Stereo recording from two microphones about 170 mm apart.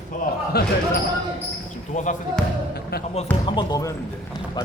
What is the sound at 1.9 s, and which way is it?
Speech, 45° left (ahead or behind).